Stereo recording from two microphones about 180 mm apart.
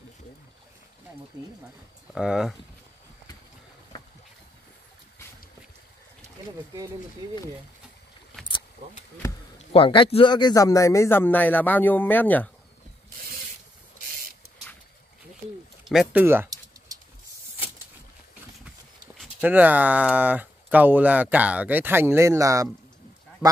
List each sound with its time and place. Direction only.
1.3 s speech: 25° right (ahead or behind)
2.1 s speech: 5° right (ahead or behind)
9.6 s a man's voice: 30° left (ahead or behind); by 12.4 s 10° left (ahead or behind)
15.8 s speech: centre (ahead or behind)
19.1 s speech: 10° right (ahead or behind)